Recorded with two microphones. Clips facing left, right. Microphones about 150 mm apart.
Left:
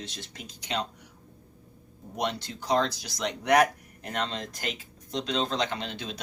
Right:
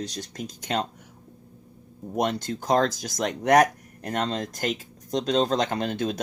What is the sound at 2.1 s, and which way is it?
Speech, 45° right (ahead or behind).